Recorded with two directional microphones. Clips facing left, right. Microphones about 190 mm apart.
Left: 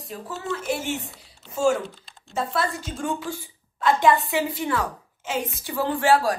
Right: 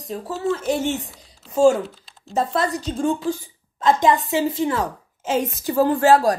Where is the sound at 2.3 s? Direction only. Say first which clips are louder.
Right 5 dB; 40° right (ahead or behind).